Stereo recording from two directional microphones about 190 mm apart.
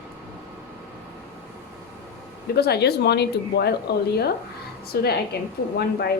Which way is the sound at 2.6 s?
60° left (ahead or behind).